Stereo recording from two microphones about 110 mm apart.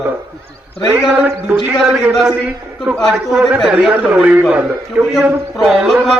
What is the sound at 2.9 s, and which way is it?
A man's voice, 15° right (ahead or behind).